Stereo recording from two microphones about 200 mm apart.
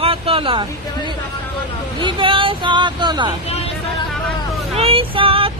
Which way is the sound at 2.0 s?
25° right (ahead or behind).